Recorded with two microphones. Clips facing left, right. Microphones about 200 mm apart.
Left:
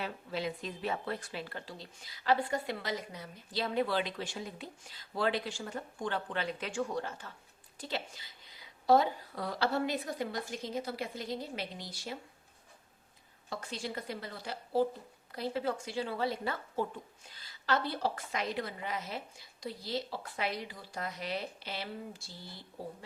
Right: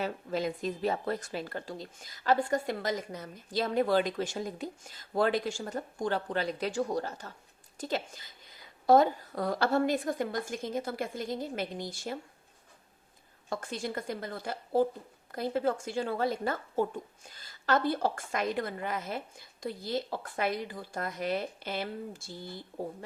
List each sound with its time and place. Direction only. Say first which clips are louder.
0.0 s a woman's voice: right 5 dB; 45° right (ahead or behind)
13.5 s a woman's voice: right 4 dB; 50° right (ahead or behind)